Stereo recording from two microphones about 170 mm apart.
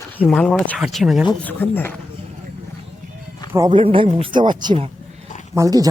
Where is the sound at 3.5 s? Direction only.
20° right (ahead or behind).